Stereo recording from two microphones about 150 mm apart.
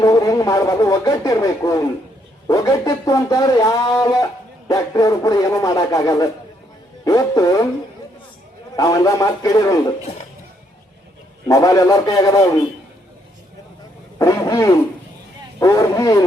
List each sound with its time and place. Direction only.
0.0 s speech: 20° left (ahead or behind)
8.7 s speech: 20° left (ahead or behind)
11.4 s speech: 20° left (ahead or behind)
14.2 s speech: 20° left (ahead or behind)